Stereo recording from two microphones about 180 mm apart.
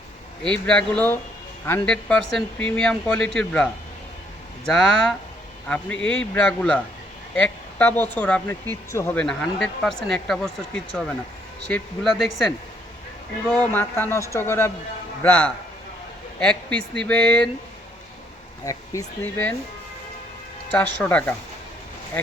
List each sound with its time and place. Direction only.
0.4 s a man's voice: 5° left (ahead or behind)
18.6 s a man's voice: 15° left (ahead or behind)
20.7 s a man's voice: 10° left (ahead or behind)